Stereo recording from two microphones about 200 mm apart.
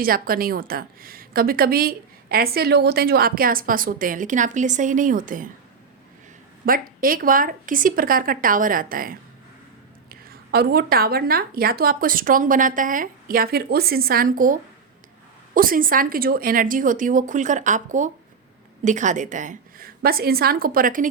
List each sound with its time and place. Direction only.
0.0 s a woman's voice: 45° right (ahead or behind)
6.7 s a woman's voice: 45° right (ahead or behind)